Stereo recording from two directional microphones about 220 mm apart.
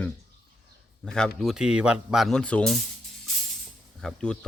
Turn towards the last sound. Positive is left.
turn(degrees=5)  # may be behind; listen again after turning